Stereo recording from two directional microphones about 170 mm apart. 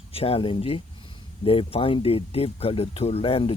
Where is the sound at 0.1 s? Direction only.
35° left (ahead or behind).